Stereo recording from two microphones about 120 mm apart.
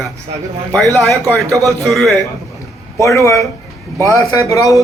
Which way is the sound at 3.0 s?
25° left (ahead or behind).